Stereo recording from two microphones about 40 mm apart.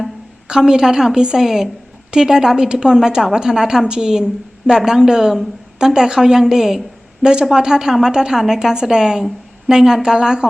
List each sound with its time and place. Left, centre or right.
0.4 s a woman's voice: centre